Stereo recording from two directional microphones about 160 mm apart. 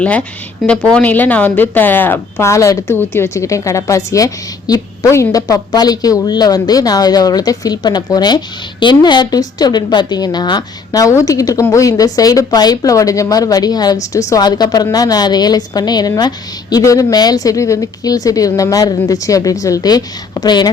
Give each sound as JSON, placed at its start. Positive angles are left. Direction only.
{"t": 0.0, "sound": "a woman's voice", "side_deg": 10}